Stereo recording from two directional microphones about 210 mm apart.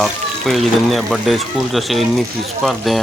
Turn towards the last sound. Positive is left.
turn(degrees=0)  # may be behind; listen again after turning